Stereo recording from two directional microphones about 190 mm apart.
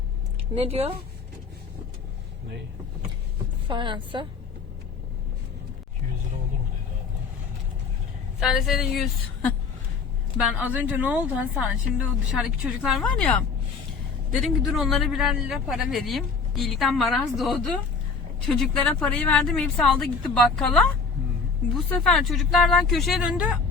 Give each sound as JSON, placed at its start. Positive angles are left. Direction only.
{"t": 0.5, "sound": "a woman's voice", "side_deg": -30}
{"t": 3.7, "sound": "a woman's voice", "side_deg": -25}
{"t": 8.4, "sound": "a woman's voice", "side_deg": 0}
{"t": 14.4, "sound": "speech", "side_deg": 0}
{"t": 21.8, "sound": "speech", "side_deg": 5}